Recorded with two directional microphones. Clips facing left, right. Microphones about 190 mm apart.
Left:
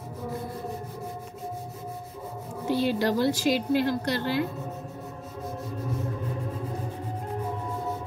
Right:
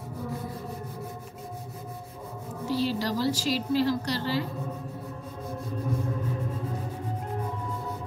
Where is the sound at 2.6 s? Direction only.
60° left (ahead or behind).